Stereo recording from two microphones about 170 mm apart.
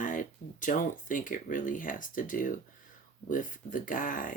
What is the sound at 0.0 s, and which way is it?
Speech, 50° left (ahead or behind).